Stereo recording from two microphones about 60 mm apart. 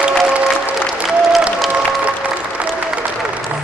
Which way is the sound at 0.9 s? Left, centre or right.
Centre.